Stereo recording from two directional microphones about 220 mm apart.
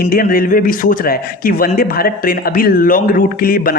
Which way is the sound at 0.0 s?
40° left (ahead or behind).